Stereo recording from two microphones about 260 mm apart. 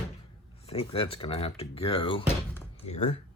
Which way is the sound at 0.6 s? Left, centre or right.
Left.